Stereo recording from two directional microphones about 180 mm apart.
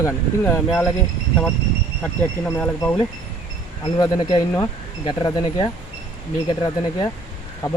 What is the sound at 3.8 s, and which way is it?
Speech, 20° left (ahead or behind).